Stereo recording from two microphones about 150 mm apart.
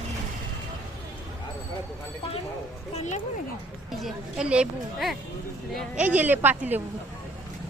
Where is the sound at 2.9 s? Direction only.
50° left (ahead or behind).